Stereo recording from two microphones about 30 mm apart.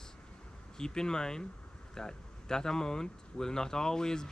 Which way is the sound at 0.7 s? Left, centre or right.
Left.